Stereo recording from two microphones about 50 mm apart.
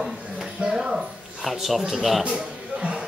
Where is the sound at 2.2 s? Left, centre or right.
Centre.